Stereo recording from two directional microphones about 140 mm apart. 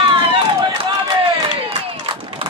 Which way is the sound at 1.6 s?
40° right (ahead or behind).